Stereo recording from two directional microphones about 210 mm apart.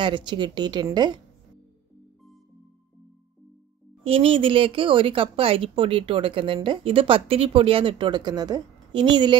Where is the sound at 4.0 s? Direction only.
25° right (ahead or behind).